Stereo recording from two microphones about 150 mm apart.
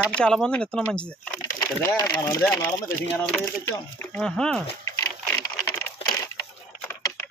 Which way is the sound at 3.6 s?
20° left (ahead or behind).